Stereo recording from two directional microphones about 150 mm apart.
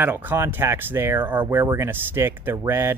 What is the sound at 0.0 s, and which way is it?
Speech, 15° right (ahead or behind).